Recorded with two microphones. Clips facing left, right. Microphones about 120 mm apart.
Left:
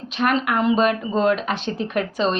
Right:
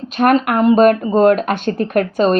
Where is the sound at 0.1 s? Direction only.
50° right (ahead or behind).